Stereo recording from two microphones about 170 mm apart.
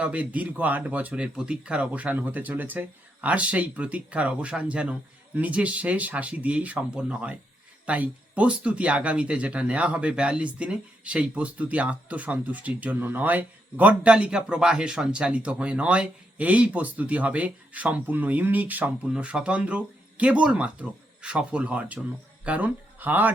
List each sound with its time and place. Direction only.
0.0 s speech: 10° right (ahead or behind)